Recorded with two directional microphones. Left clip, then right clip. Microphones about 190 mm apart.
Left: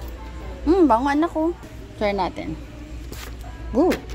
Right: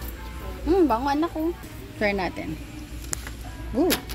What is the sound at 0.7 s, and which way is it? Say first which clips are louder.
Speech: left 4 dB; 25° left (ahead or behind).